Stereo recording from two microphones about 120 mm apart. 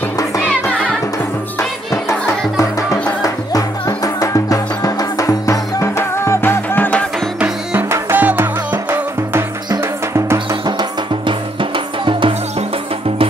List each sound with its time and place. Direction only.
2.0 s music: 25° left (ahead or behind)
7.3 s music: 10° right (ahead or behind)
12.1 s music: 45° right (ahead or behind)